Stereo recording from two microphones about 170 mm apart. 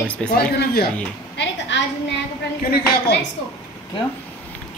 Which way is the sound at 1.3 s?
90° left.